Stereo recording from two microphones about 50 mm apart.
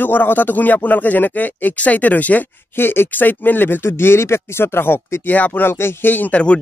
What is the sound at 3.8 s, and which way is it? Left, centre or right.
Speech, left.